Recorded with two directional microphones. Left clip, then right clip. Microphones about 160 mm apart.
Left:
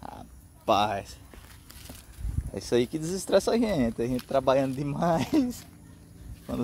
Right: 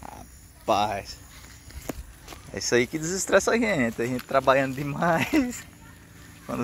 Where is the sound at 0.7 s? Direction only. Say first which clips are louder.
Right 1 dB; 20° left (ahead or behind).